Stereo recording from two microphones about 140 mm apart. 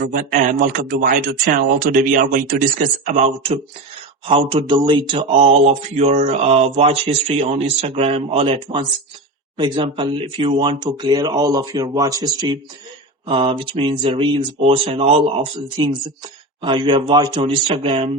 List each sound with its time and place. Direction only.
0.0 s speech: 90° right; by 3.6 s 50° right (ahead or behind)
4.3 s speech: 40° right (ahead or behind)
13.2 s speech: 40° right (ahead or behind)
17.4 s speech: 40° right (ahead or behind)